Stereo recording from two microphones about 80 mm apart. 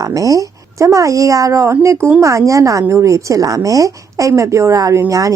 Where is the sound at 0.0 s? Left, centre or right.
Right.